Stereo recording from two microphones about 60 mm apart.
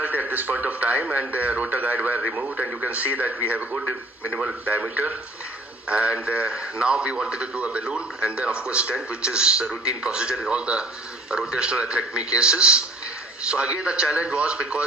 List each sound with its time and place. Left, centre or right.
0.0 s speech: right